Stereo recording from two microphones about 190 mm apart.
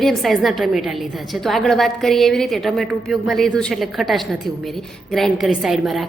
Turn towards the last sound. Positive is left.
turn(degrees=0)  # may be behind; listen again after turning